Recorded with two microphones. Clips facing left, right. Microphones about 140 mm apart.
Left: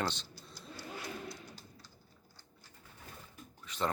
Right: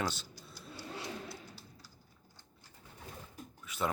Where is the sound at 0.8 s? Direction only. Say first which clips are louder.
Right 1 dB; 25° right (ahead or behind).